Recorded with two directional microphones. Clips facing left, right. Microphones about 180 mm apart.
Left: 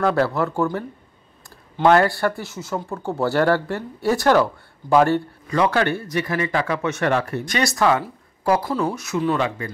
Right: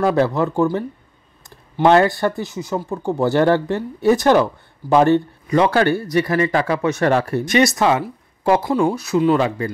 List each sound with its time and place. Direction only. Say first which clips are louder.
0.0 s speech: right 3 dB; 20° right (ahead or behind)
5.7 s speech: right 4 dB; 35° right (ahead or behind)
7.4 s speech: right 4 dB; 20° right (ahead or behind)